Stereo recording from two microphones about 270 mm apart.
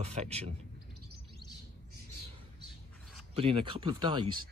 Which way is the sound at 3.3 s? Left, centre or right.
Centre.